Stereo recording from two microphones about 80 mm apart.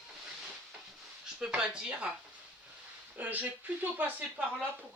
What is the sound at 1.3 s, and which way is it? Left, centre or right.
Speech, centre.